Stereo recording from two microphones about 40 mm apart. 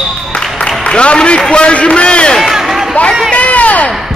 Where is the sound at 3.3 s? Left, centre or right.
Left.